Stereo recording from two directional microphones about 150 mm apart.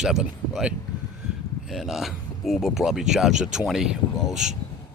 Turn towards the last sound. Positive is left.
turn(degrees=-5)  # may be behind; listen again after turning